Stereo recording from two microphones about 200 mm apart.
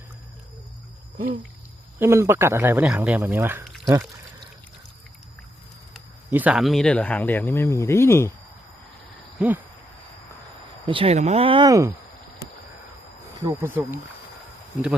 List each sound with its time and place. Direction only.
2.0 s speech: 15° right (ahead or behind)
3.8 s pour: 15° right (ahead or behind)
5.9 s speech: 5° right (ahead or behind); by 8.3 s 10° left (ahead or behind)
9.4 s speech: 10° right (ahead or behind)
10.8 s speech: 25° right (ahead or behind)
13.6 s speech: 10° right (ahead or behind)